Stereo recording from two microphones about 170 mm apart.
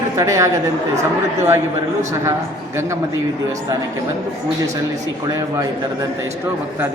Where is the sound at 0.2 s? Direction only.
15° right (ahead or behind).